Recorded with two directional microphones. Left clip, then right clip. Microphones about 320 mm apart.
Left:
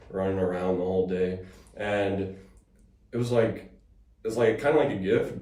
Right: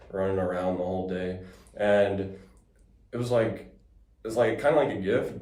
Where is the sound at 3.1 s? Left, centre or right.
Centre.